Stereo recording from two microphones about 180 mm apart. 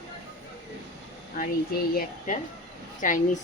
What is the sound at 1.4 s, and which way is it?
A woman's voice, 55° left (ahead or behind).